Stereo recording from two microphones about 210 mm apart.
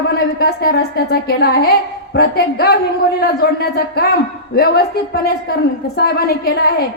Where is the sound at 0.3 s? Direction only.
50° left (ahead or behind).